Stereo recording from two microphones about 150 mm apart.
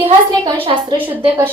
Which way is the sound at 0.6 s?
35° right (ahead or behind).